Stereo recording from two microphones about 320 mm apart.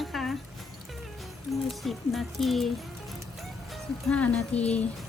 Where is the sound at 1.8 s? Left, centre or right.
Centre.